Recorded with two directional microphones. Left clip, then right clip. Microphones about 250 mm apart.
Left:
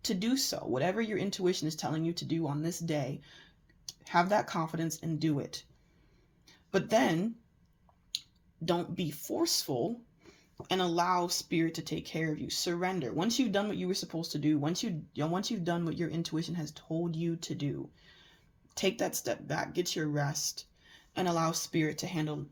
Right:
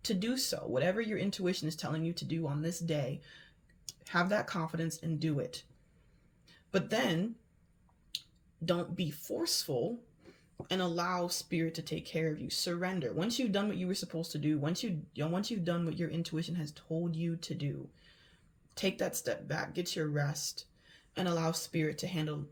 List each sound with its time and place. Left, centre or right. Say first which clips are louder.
0.7 s speech: even; left
4.1 s speech: left 4 dB; left
8.6 s speech: left 2 dB; left
18.7 s speech: left 3 dB; left